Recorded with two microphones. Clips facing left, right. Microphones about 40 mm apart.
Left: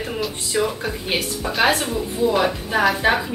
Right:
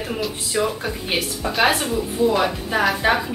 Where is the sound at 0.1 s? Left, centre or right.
Centre.